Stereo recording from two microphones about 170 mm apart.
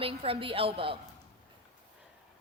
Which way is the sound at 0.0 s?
35° right (ahead or behind).